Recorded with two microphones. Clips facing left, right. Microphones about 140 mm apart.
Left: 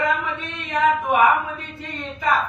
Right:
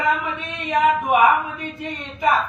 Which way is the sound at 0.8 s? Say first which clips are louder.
Right 1 dB; 15° right (ahead or behind).